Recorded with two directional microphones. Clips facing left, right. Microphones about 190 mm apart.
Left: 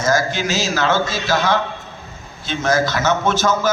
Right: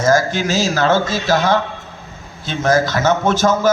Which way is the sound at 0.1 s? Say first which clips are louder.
Right 3 dB; 50° right (ahead or behind).